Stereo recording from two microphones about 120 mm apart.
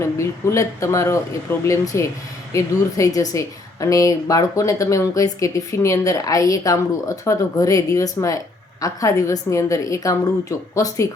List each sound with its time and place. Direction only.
0.0 s a woman's voice: 25° left (ahead or behind)